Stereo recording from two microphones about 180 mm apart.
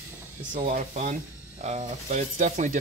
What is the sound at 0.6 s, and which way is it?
Speech, 45° right (ahead or behind).